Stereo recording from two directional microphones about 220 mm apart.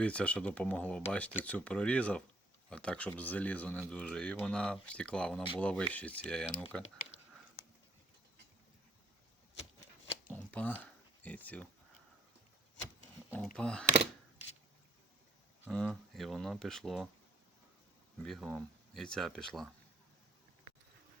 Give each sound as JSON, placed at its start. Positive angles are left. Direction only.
{"t": 0.0, "sound": "speech", "side_deg": 5}
{"t": 7.6, "sound": "horse", "side_deg": 45}
{"t": 10.2, "sound": "a sound", "side_deg": 10}
{"t": 13.3, "sound": "speech", "side_deg": 5}
{"t": 15.7, "sound": "speech", "side_deg": 0}
{"t": 18.2, "sound": "speech", "side_deg": 0}